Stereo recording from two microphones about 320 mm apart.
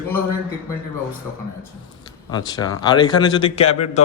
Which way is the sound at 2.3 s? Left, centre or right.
Centre.